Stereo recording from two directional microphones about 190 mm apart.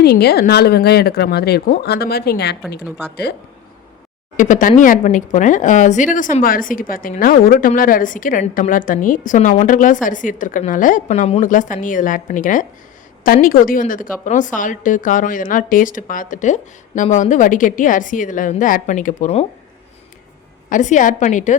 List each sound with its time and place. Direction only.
0.0 s speech: 60° left (ahead or behind)
4.4 s speech: 45° left (ahead or behind)
20.7 s a woman's voice: 40° left (ahead or behind)